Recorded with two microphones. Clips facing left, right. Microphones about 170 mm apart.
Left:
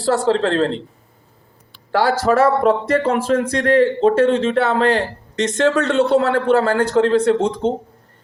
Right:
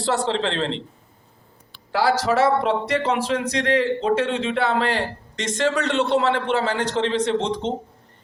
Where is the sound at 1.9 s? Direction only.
45° left (ahead or behind).